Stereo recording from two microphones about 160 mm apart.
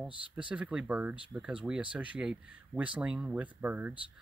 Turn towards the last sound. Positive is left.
turn(degrees=-10)  # may be behind; listen again after turning